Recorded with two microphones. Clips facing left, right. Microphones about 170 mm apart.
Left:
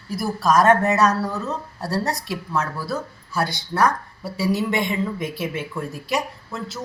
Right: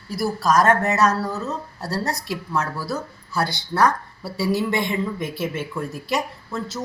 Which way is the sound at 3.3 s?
20° left (ahead or behind).